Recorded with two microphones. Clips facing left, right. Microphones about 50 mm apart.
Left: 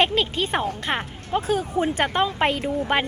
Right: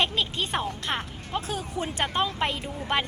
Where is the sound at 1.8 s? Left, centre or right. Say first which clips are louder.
Left 8 dB; left.